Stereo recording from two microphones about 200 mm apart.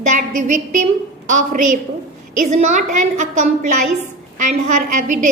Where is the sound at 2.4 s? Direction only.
35° right (ahead or behind).